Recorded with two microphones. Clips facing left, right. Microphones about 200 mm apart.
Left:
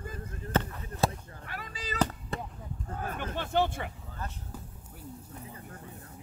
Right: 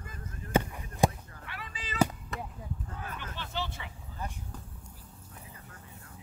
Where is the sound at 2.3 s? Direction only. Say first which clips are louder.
Left 2 dB; 30° left (ahead or behind).